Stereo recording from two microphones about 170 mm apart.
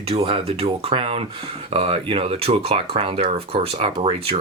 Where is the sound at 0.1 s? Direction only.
35° right (ahead or behind).